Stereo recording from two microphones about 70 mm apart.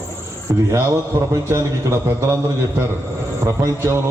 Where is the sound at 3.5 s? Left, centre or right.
Right.